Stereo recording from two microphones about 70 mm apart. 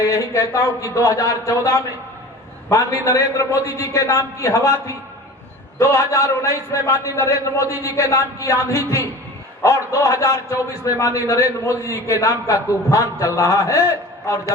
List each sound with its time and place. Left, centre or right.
0.0 s a man's voice: left
5.8 s a man's voice: left